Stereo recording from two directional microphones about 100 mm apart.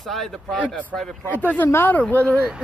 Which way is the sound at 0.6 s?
15° left (ahead or behind).